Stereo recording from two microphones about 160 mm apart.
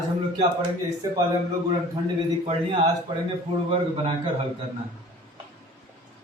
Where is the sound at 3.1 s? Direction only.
30° right (ahead or behind).